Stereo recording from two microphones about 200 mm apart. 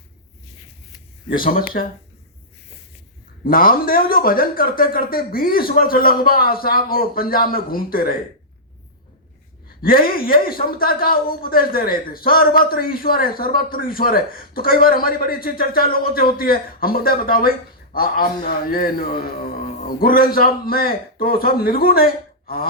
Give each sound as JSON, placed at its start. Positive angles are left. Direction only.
{"t": 1.3, "sound": "a woman's voice", "side_deg": 45}
{"t": 3.4, "sound": "a woman's voice", "side_deg": 45}
{"t": 9.8, "sound": "a woman's voice", "side_deg": 45}